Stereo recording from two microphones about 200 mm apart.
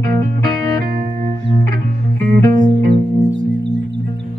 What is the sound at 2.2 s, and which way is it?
Music, 45° right (ahead or behind).